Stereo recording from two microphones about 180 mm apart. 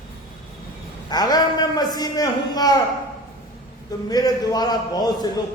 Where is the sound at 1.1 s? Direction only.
20° left (ahead or behind).